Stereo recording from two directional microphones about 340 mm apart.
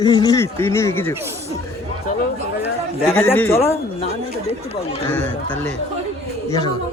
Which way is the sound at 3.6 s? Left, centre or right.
Centre.